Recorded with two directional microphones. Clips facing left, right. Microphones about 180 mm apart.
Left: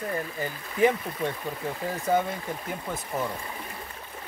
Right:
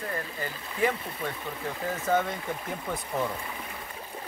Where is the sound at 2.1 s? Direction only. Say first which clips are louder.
Left 1 dB; 10° left (ahead or behind).